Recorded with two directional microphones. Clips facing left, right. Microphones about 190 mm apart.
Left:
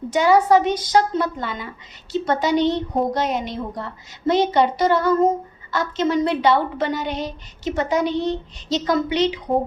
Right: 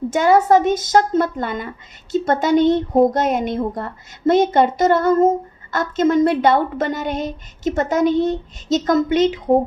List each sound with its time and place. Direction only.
0.1 s a woman's voice: 45° right (ahead or behind)